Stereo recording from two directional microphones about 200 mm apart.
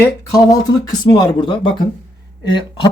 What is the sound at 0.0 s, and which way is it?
Speech, 15° left (ahead or behind).